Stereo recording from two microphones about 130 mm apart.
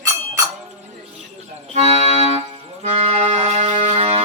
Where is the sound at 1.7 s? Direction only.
55° right (ahead or behind).